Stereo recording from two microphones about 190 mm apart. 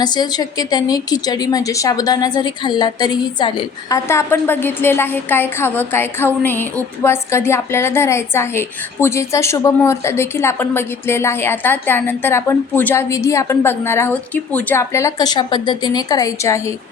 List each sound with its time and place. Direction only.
0.0 s a woman's voice: 20° left (ahead or behind)